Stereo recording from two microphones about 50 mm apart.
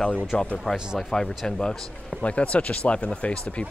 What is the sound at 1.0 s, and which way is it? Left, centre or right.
Speech, centre.